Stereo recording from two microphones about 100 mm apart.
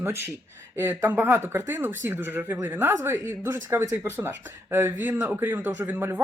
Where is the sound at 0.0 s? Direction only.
25° right (ahead or behind).